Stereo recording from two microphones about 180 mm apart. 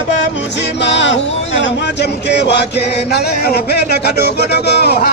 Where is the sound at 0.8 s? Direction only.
80° left.